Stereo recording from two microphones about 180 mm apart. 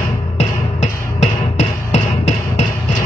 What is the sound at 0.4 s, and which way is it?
Music, 35° left (ahead or behind).